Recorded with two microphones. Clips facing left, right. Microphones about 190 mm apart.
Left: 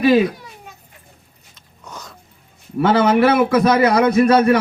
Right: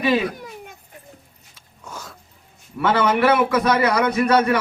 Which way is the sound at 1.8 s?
5° right (ahead or behind).